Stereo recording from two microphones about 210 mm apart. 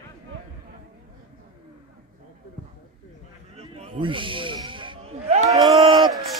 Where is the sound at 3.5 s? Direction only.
25° right (ahead or behind).